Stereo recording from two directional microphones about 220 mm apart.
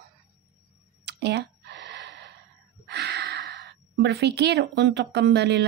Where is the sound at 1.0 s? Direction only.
50° right (ahead or behind).